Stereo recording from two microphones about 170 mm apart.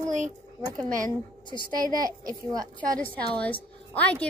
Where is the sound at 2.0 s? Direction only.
20° right (ahead or behind).